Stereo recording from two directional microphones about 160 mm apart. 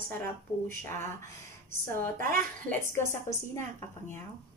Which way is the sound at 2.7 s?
15° left (ahead or behind).